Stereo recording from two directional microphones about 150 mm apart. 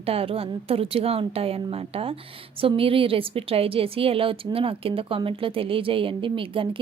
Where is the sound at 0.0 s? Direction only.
40° right (ahead or behind).